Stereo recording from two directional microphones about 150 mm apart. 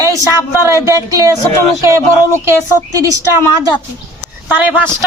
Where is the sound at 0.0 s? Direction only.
20° right (ahead or behind).